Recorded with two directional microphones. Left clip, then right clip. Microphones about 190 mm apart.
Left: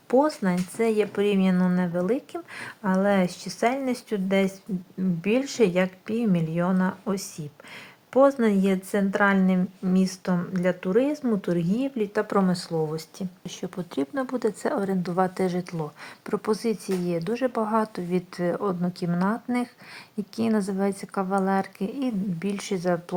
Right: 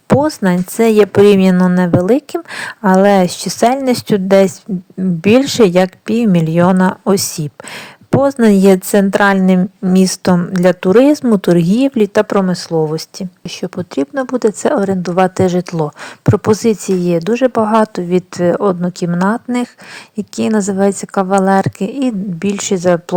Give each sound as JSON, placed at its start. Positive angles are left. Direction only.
{"t": 0.1, "sound": "speech", "side_deg": -45}